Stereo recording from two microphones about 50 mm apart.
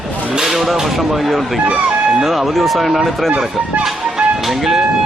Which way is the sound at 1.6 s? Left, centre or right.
Right.